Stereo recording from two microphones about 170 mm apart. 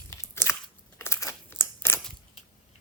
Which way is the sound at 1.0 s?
15° left (ahead or behind).